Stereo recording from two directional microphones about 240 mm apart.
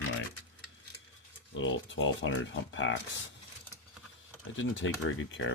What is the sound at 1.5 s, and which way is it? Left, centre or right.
Speech, left.